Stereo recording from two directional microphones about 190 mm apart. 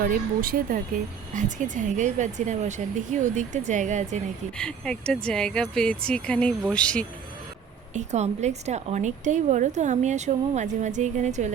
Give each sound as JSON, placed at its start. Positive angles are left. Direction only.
{"t": 0.0, "sound": "a woman's voice", "side_deg": -50}
{"t": 4.5, "sound": "speech", "side_deg": 5}
{"t": 7.9, "sound": "a woman's voice", "side_deg": -35}